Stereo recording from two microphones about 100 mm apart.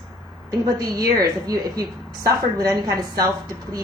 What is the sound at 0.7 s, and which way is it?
A woman's voice, 40° right (ahead or behind).